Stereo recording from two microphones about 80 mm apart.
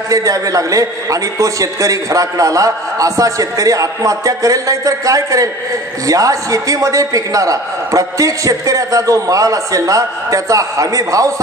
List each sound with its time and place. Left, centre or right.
0.1 s a man's voice: right